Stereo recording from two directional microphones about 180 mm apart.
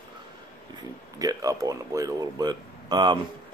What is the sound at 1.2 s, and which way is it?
Speech, 20° right (ahead or behind).